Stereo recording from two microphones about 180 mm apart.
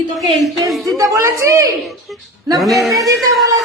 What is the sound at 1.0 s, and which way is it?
Speech, 15° right (ahead or behind).